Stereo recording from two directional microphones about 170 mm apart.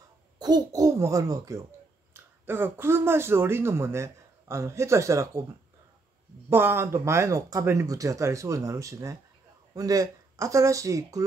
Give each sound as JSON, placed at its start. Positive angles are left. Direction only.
{"t": 0.4, "sound": "a child's voice", "side_deg": -25}
{"t": 6.5, "sound": "speech", "side_deg": -15}